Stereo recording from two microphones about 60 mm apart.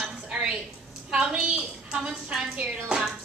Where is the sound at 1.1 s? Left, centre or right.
Centre.